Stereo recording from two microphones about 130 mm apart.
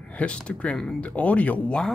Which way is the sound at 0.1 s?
10° left (ahead or behind).